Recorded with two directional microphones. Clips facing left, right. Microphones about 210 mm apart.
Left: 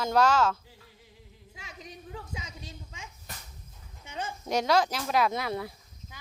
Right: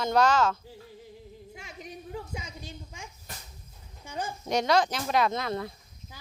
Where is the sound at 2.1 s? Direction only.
30° right (ahead or behind).